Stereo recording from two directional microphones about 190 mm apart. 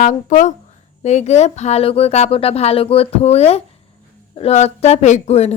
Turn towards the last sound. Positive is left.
turn(degrees=35)  # may be behind; listen again after turning